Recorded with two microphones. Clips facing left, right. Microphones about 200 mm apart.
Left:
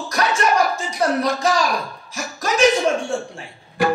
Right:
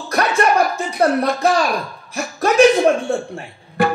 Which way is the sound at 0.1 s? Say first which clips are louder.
Right 3 dB; 55° right (ahead or behind).